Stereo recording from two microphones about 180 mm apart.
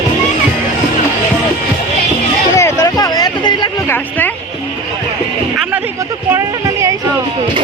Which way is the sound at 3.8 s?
10° left (ahead or behind).